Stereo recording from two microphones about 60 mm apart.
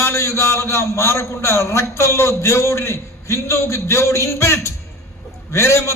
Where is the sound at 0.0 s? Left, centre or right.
Left.